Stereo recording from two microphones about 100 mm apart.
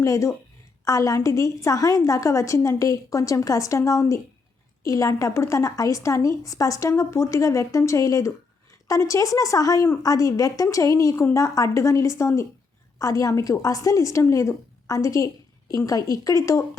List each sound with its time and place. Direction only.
0.0 s a woman's voice: 30° left (ahead or behind)